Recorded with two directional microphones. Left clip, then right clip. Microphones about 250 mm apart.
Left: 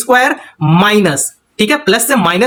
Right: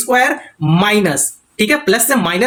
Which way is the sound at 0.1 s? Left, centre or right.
Left.